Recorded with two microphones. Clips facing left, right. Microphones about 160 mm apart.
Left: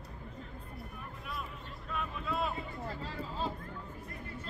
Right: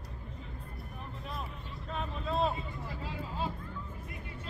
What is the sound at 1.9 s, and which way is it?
Vehicle, 30° right (ahead or behind).